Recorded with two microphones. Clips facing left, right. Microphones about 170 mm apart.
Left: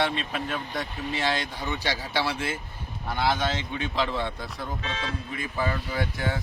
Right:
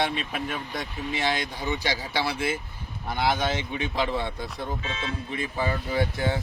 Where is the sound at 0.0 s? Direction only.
10° right (ahead or behind).